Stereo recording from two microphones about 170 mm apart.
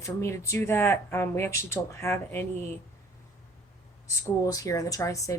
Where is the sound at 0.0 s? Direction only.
15° left (ahead or behind).